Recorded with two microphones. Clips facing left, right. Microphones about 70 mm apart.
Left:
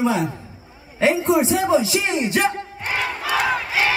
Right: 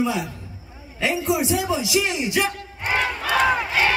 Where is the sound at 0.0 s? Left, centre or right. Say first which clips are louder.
Left 3 dB; left.